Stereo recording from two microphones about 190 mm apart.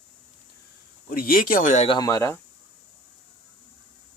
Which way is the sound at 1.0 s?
50° left (ahead or behind).